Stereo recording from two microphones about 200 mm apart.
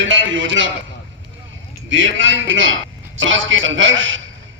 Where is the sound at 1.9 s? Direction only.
70° right (ahead or behind).